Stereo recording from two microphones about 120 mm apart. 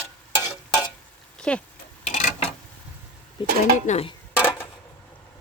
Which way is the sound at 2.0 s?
75° left (ahead or behind).